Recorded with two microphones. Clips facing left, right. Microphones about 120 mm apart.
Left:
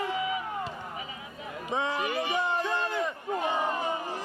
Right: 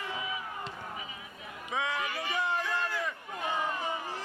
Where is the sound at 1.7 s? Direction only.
30° left (ahead or behind).